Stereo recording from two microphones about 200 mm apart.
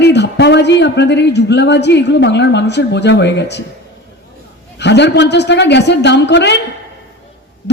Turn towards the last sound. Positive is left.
turn(degrees=60)  # may be behind; listen again after turning